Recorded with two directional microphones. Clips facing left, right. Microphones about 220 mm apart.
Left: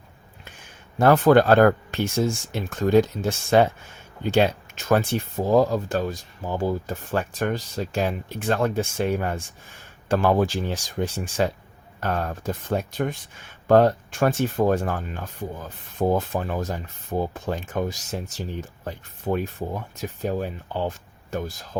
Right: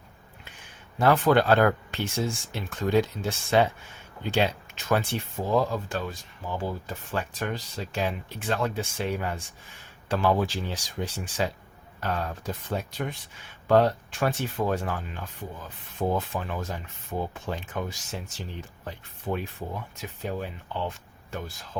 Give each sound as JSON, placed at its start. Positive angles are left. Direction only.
{"t": 0.9, "sound": "speech", "side_deg": 45}